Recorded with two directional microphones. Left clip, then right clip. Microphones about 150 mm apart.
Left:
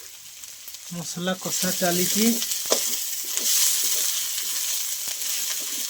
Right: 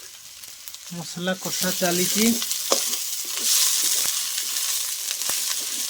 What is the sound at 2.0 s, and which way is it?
Frying, 20° right (ahead or behind).